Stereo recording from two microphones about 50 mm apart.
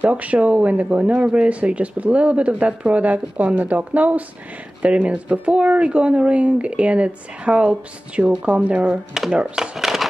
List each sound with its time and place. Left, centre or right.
0.1 s speech: right
9.6 s speech: centre